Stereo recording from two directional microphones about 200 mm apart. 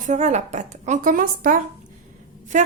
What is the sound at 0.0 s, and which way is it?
A woman's voice, 35° right (ahead or behind).